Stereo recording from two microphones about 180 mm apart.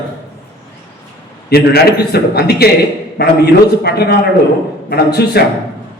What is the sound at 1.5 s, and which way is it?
A man's voice, 60° left (ahead or behind).